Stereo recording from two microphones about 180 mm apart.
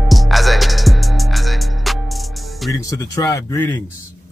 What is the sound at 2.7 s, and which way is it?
Speech, 20° left (ahead or behind).